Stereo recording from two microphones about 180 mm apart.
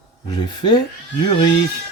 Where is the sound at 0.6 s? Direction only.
25° left (ahead or behind).